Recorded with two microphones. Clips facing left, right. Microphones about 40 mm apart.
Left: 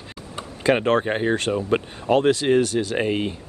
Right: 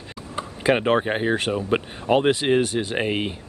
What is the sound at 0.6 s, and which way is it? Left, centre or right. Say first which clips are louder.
Speech: left 1 dB; centre.